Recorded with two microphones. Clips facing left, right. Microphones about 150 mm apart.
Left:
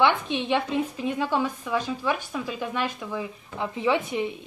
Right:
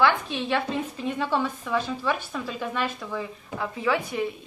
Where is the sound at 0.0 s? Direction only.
20° left (ahead or behind).